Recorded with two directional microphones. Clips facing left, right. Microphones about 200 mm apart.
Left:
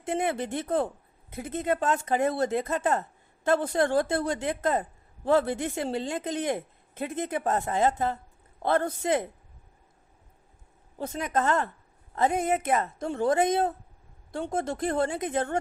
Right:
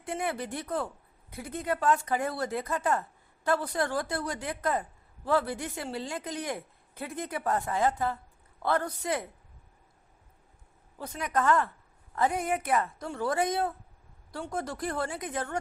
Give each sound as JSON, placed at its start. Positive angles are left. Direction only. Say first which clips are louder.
{"t": 0.0, "sound": "a woman's voice", "louder": "left 5 dB", "side_deg": 25}
{"t": 10.9, "sound": "a woman's voice", "louder": "left 3 dB", "side_deg": 25}